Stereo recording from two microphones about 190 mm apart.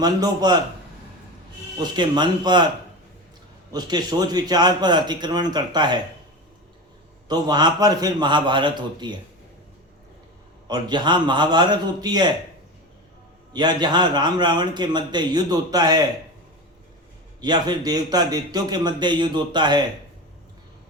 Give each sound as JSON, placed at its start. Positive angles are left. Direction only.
{"t": 0.0, "sound": "a man's voice", "side_deg": -20}
{"t": 1.8, "sound": "a man's voice", "side_deg": -25}
{"t": 3.7, "sound": "a man's voice", "side_deg": -20}
{"t": 7.3, "sound": "a man's voice", "side_deg": -20}
{"t": 10.7, "sound": "a man's voice", "side_deg": -25}
{"t": 13.5, "sound": "a man's voice", "side_deg": -20}
{"t": 17.4, "sound": "a man's voice", "side_deg": -20}